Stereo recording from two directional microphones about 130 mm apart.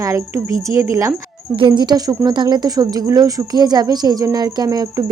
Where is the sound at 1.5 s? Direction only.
35° right (ahead or behind).